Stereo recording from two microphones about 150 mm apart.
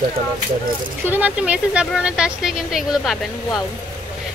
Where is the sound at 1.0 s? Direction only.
10° right (ahead or behind).